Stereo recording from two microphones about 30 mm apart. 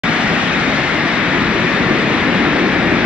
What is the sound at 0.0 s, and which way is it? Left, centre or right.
Vehicle, right.